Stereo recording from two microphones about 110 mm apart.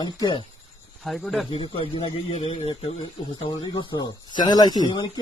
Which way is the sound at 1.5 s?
50° left (ahead or behind).